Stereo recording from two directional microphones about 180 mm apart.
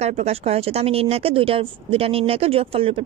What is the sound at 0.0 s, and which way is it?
Speech, 35° right (ahead or behind).